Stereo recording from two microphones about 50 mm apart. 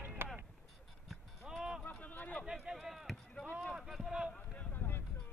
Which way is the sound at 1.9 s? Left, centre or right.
Left.